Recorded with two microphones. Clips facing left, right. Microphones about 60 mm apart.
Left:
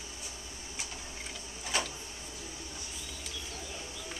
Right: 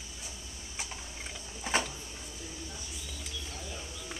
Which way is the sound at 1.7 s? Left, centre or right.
Right.